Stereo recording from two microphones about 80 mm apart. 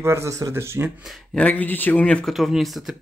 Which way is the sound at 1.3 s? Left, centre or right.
Centre.